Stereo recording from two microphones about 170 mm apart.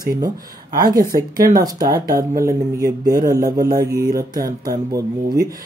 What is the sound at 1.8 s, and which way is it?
Speech, 60° right (ahead or behind).